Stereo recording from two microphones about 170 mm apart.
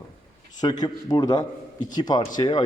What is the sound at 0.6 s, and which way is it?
Speech, 25° left (ahead or behind).